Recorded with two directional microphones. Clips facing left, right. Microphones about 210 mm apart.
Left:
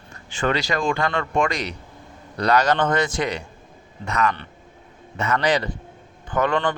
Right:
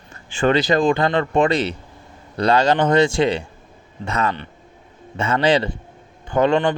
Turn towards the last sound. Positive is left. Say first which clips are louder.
# right 5 dB
turn(degrees=-20)  # may be behind; listen again after turning